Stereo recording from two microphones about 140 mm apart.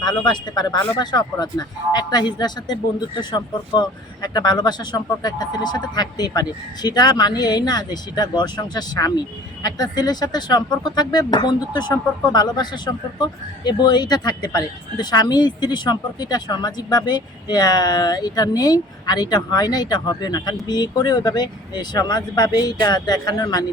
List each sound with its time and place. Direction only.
0.0 s speech: 30° left (ahead or behind)